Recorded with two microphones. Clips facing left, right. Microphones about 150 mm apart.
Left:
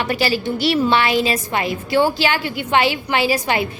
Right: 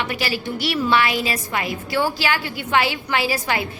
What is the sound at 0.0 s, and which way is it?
A woman's voice, 35° left (ahead or behind).